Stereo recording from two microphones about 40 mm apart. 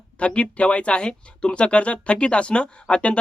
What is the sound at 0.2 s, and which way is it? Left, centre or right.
Speech, left.